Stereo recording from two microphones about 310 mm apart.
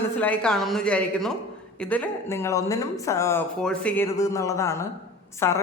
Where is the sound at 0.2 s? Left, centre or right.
Centre.